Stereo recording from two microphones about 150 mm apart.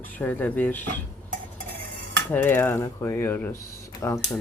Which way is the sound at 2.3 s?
15° left (ahead or behind).